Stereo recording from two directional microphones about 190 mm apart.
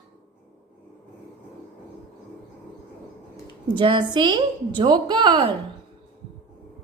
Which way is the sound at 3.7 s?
25° right (ahead or behind).